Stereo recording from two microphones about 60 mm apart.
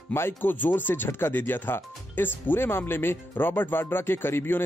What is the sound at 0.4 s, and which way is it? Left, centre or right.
Speech, left.